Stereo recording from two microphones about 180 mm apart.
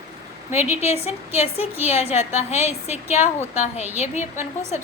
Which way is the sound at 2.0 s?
35° left (ahead or behind).